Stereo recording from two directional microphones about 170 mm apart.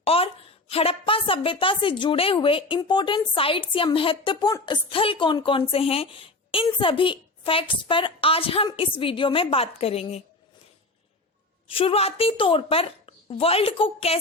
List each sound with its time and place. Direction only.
0.0 s a sound: 35° left (ahead or behind)
0.7 s a woman's voice: 35° left (ahead or behind)
11.7 s a woman's voice: 35° left (ahead or behind)